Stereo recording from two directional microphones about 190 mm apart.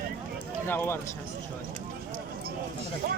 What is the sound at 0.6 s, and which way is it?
Speech, 10° left (ahead or behind).